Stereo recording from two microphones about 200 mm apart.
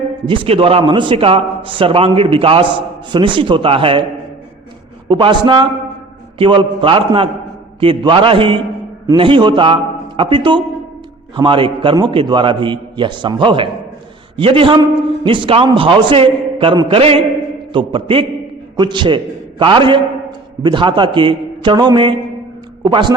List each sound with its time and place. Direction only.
0.3 s a man's voice: 25° right (ahead or behind)
5.0 s a man's voice: 25° right (ahead or behind)